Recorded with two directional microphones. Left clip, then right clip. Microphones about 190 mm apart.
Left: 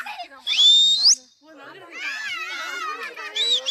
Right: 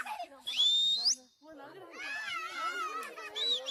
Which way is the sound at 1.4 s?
20° right (ahead or behind).